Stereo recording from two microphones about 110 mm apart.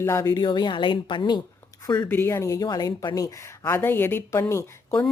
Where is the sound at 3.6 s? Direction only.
20° left (ahead or behind).